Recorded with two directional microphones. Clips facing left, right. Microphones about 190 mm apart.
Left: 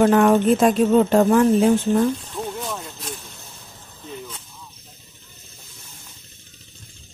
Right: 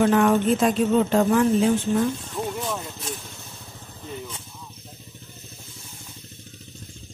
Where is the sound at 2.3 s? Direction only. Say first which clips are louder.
Right 1 dB; centre (ahead or behind).